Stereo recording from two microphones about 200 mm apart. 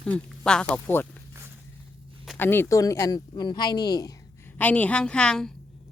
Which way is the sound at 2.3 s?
10° left (ahead or behind).